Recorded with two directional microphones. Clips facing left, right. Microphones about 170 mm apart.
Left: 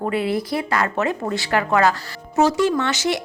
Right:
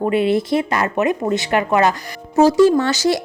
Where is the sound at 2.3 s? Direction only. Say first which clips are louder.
Right 6 dB; 35° right (ahead or behind).